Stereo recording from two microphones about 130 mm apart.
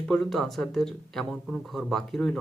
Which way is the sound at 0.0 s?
5° left (ahead or behind).